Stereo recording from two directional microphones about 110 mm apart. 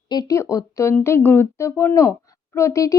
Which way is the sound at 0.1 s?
35° left (ahead or behind).